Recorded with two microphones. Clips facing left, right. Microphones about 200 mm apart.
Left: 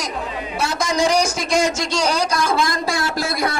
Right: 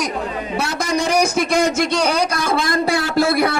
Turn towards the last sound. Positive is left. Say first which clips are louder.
# right 6 dB
turn(degrees=-60)  # may be behind; listen again after turning